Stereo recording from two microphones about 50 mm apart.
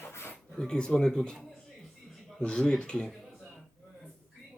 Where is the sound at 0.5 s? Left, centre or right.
Centre.